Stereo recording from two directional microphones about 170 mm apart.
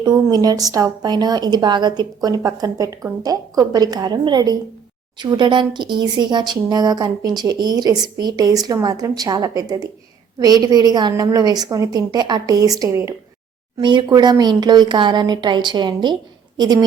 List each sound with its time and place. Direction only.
0.0 s a woman's voice: 25° right (ahead or behind)